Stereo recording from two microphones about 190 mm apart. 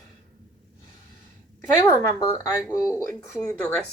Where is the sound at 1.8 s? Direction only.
15° left (ahead or behind).